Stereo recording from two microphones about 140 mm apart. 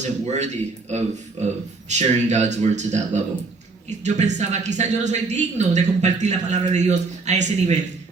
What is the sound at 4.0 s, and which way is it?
A woman's voice, 55° right (ahead or behind).